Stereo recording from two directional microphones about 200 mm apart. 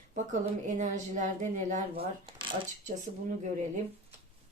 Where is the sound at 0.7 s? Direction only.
35° right (ahead or behind).